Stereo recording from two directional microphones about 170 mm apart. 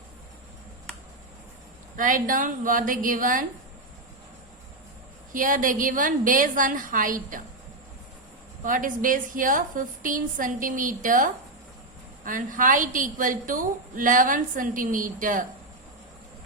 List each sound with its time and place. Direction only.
2.0 s a woman's voice: 50° right (ahead or behind)
5.3 s a woman's voice: 50° right (ahead or behind)
8.6 s a woman's voice: 50° right (ahead or behind)